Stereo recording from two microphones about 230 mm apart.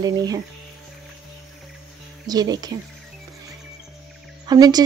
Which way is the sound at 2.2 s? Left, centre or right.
Centre.